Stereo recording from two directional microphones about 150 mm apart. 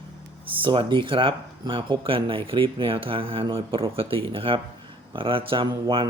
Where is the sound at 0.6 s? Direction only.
35° right (ahead or behind).